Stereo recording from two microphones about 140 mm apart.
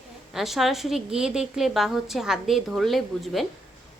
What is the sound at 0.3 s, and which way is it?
A woman's voice, centre (ahead or behind).